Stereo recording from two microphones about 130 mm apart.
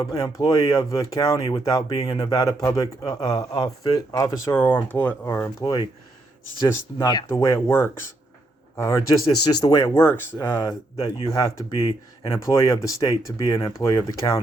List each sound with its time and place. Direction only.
0.3 s speech: 25° left (ahead or behind)
1.4 s speech: 40° left (ahead or behind)
2.2 s speech: 25° left (ahead or behind)
5.6 s speech: 35° left (ahead or behind)
7.4 s speech: 20° left (ahead or behind)
11.7 s speech: 40° left (ahead or behind)
12.6 s speech: 25° left (ahead or behind)